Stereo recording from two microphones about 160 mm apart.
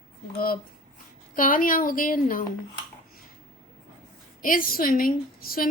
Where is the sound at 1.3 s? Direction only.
60° left (ahead or behind).